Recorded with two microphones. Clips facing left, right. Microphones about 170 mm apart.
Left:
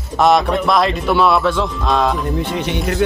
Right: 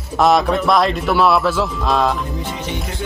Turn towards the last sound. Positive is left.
turn(degrees=70)  # may be behind; listen again after turning